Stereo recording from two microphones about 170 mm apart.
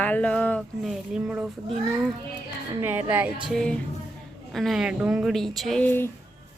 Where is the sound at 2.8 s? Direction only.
10° right (ahead or behind).